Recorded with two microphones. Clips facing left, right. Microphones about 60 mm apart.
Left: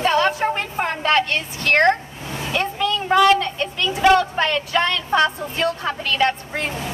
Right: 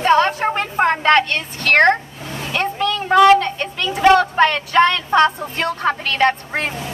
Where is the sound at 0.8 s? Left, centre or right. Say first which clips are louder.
Right 5 dB; right.